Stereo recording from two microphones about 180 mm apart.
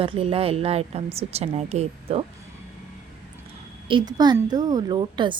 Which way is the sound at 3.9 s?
25° right (ahead or behind).